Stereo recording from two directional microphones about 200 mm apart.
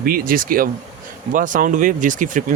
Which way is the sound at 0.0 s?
45° right (ahead or behind).